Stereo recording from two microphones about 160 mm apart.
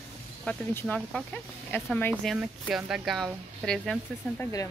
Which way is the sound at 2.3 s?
5° right (ahead or behind).